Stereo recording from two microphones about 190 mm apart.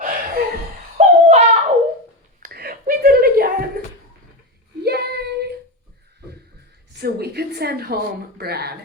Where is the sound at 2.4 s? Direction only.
55° right (ahead or behind).